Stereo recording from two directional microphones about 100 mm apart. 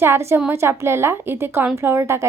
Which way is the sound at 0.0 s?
25° right (ahead or behind).